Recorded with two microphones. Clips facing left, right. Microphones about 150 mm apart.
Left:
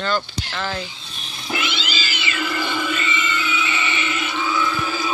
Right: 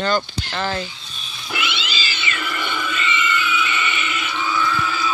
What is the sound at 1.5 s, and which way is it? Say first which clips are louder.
Cat: left 1 dB; 30° left (ahead or behind).